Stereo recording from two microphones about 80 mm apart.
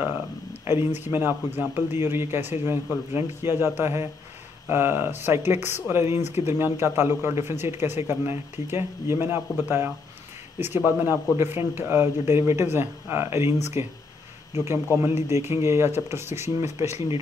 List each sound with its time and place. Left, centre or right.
0.0 s speech: right
15.0 s speech: right